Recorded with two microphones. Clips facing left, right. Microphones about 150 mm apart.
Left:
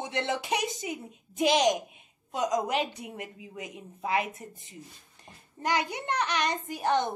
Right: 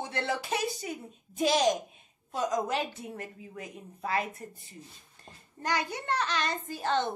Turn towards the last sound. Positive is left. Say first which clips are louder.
# left 2 dB
turn(degrees=15)  # may be behind; listen again after turning